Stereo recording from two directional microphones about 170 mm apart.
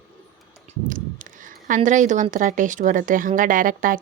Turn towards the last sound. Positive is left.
turn(degrees=-55)  # may be behind; listen again after turning